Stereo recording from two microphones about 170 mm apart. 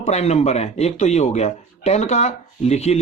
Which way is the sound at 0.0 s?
40° left (ahead or behind).